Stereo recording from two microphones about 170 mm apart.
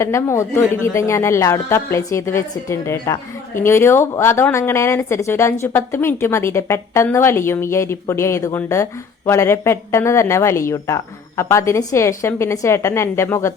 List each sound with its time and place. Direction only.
0.0 s speech: 15° left (ahead or behind)